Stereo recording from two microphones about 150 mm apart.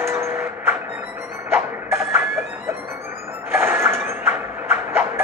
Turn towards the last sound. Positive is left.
turn(degrees=-15)  # may be behind; listen again after turning